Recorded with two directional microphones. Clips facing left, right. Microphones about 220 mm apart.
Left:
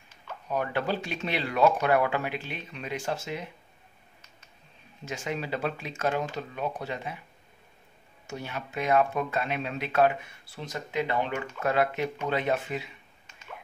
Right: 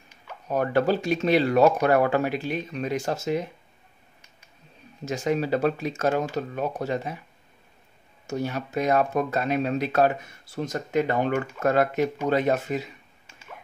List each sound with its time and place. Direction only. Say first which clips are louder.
0.5 s speech: right 7 dB; 40° right (ahead or behind)
5.0 s speech: right 8 dB; 40° right (ahead or behind)
8.3 s speech: right 8 dB; 40° right (ahead or behind)